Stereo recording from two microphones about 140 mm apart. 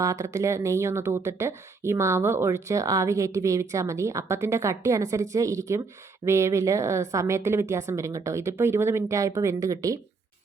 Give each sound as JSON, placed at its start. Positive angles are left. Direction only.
{"t": 0.0, "sound": "speech", "side_deg": -25}